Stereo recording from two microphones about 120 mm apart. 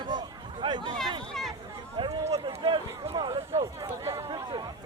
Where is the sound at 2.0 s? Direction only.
40° right (ahead or behind).